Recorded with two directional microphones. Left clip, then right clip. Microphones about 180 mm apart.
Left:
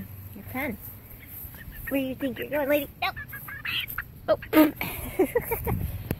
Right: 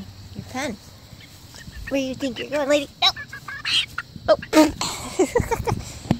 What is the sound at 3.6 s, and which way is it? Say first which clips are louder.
Fowl: right 9 dB; 60° right (ahead or behind).